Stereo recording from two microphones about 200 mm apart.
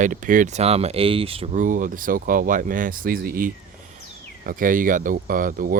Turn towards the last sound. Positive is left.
turn(degrees=-45)  # may be behind; listen again after turning